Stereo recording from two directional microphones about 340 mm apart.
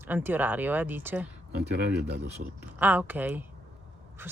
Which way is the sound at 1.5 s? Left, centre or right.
Right.